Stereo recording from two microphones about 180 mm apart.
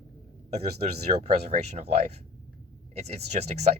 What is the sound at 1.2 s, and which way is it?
Speech, 40° right (ahead or behind).